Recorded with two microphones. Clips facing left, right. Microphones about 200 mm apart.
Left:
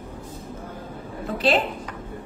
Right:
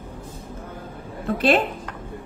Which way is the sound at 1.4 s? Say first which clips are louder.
Right 2 dB; 55° right (ahead or behind).